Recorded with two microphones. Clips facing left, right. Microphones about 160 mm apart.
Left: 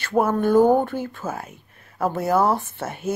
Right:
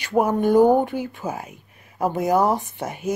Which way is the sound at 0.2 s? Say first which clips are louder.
Right 1 dB; 15° right (ahead or behind).